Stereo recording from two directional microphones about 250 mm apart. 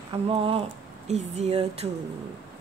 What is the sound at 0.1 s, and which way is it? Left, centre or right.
A woman's voice, right.